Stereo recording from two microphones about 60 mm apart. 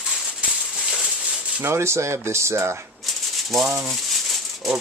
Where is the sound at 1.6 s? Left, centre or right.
Right.